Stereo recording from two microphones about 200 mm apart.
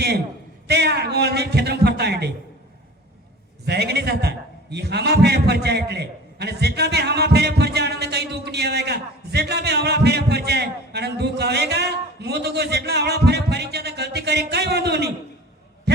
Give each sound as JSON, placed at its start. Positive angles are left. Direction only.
{"t": 0.7, "sound": "a man's voice", "side_deg": -55}
{"t": 3.7, "sound": "a man's voice", "side_deg": -55}